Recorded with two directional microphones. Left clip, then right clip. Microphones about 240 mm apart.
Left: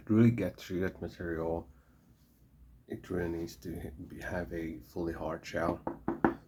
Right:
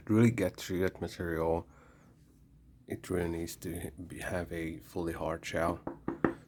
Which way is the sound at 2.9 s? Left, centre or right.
Right.